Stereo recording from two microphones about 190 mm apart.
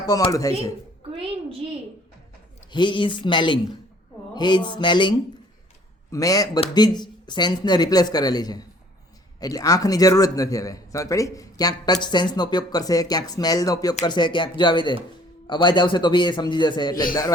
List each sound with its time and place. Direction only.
0.0 s a man's voice: 20° left (ahead or behind)
1.1 s a sound: 30° right (ahead or behind)
2.7 s a man's voice: 25° left (ahead or behind)